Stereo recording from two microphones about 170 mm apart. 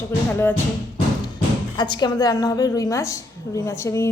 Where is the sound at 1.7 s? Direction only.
25° left (ahead or behind).